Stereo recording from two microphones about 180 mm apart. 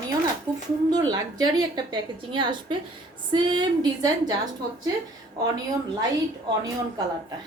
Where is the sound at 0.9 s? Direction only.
20° right (ahead or behind).